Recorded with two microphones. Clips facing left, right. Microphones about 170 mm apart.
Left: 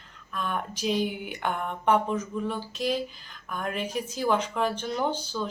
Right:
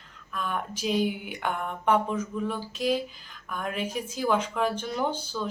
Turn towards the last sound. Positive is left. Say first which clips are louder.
# left 1 dB
turn(degrees=-5)  # may be behind; listen again after turning